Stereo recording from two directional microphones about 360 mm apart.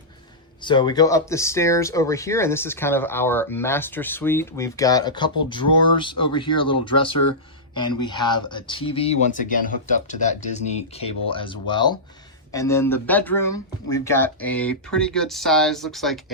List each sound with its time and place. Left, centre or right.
0.6 s speech: centre